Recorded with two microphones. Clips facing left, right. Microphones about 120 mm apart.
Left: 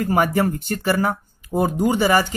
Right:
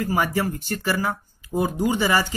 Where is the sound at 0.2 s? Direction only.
45° left (ahead or behind).